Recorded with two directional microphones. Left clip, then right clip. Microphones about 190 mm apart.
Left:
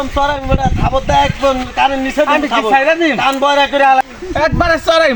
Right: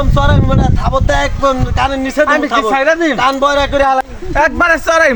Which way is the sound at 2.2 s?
15° right (ahead or behind).